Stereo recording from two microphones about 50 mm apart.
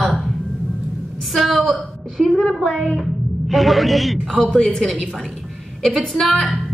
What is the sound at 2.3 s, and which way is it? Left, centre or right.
Speech, centre.